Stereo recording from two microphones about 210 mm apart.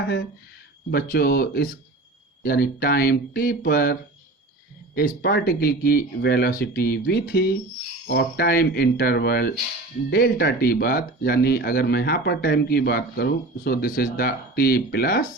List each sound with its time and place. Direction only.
0.9 s speech: 50° left (ahead or behind)
4.9 s speech: 50° left (ahead or behind)